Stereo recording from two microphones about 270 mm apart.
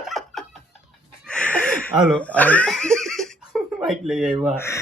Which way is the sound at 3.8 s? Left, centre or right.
Centre.